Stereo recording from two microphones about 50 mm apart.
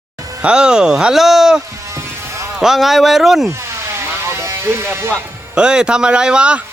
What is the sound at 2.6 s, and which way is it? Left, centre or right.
Speech, centre.